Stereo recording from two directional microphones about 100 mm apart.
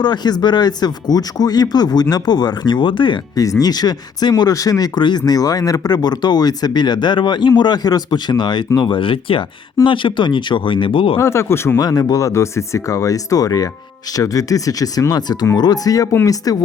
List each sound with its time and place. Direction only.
0.0 s speech: 45° left (ahead or behind)
3.3 s speech: 35° left (ahead or behind); by 11.2 s 60° left (ahead or behind)
11.2 s speech: 25° left (ahead or behind)
11.8 s speech: 40° left (ahead or behind)